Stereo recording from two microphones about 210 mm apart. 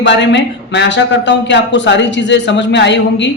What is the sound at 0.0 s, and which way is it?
A man's voice, 60° left (ahead or behind).